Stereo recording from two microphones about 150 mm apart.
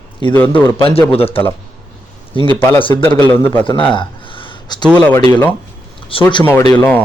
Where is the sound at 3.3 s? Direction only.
15° left (ahead or behind).